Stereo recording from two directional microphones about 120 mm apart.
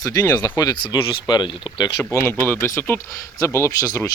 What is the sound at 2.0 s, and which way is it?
Speech, 25° left (ahead or behind).